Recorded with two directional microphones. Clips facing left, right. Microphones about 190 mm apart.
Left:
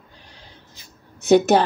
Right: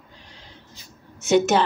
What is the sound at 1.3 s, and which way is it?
Speech, 35° left (ahead or behind).